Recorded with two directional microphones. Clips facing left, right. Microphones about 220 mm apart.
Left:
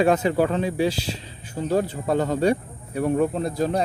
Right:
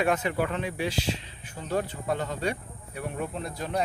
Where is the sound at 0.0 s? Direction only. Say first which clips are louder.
Left 7 dB; 30° left (ahead or behind).